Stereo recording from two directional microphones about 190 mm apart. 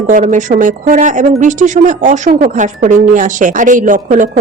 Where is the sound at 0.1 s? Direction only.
45° right (ahead or behind).